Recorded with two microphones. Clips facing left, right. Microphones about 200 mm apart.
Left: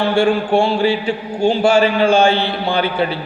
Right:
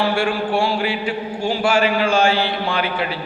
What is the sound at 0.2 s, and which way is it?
A man's voice, 25° left (ahead or behind).